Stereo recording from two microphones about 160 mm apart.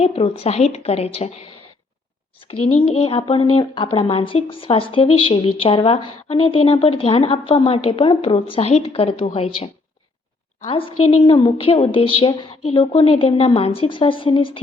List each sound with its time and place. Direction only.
0.0 s speech: 40° left (ahead or behind)
3.0 s speech: 35° left (ahead or behind)
10.7 s speech: 35° left (ahead or behind)